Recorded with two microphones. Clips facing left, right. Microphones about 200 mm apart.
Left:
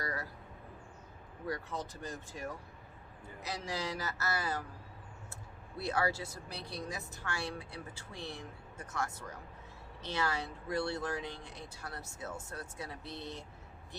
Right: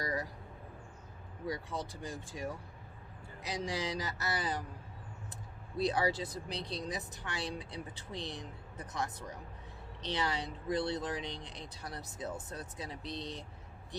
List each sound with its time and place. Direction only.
0.0 s speech: 20° right (ahead or behind)
1.5 s speech: 15° right (ahead or behind)